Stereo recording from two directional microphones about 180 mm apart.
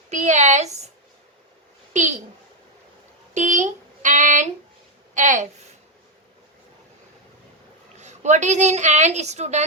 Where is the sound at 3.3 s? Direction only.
40° right (ahead or behind).